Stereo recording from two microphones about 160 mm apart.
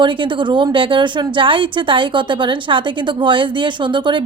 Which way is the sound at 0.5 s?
30° right (ahead or behind).